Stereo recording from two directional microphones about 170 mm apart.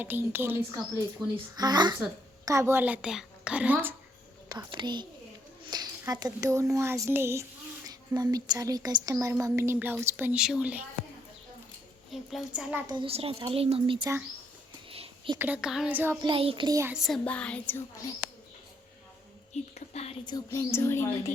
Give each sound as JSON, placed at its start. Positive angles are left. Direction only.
{"t": 0.0, "sound": "speech", "side_deg": -10}
{"t": 1.5, "sound": "a woman's voice", "side_deg": -25}
{"t": 4.4, "sound": "a woman's voice", "side_deg": -25}
{"t": 12.1, "sound": "a woman's voice", "side_deg": -5}
{"t": 12.9, "sound": "a woman's voice", "side_deg": -30}
{"t": 14.8, "sound": "a sound", "side_deg": -35}
{"t": 15.4, "sound": "speech", "side_deg": -10}
{"t": 16.2, "sound": "a woman's voice", "side_deg": -30}
{"t": 16.6, "sound": "a woman's voice", "side_deg": -20}
{"t": 16.9, "sound": "speech", "side_deg": 0}
{"t": 19.9, "sound": "a sound", "side_deg": 40}
{"t": 20.2, "sound": "speech", "side_deg": 20}